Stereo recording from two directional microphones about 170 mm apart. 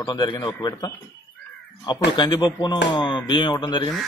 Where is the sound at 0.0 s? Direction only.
25° left (ahead or behind).